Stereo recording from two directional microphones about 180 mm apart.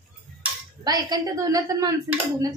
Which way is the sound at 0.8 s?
20° right (ahead or behind).